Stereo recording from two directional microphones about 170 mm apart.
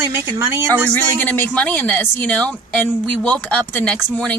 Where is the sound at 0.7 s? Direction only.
10° left (ahead or behind).